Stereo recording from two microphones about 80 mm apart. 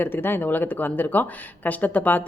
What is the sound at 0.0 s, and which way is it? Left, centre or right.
Speech, left.